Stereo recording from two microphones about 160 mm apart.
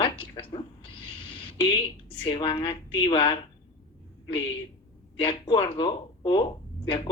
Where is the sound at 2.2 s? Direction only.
30° left (ahead or behind).